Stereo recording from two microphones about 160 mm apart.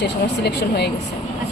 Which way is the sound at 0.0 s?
90° left.